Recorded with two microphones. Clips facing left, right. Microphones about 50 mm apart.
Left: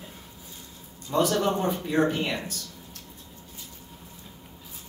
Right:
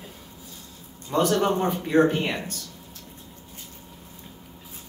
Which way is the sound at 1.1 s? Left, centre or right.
Right.